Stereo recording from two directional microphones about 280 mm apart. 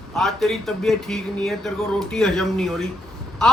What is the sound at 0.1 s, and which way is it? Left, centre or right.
Speech, centre.